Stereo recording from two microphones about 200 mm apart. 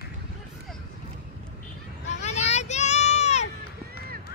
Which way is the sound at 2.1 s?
35° left (ahead or behind).